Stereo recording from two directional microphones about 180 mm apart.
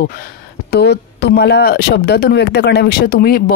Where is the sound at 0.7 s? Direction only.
65° left (ahead or behind).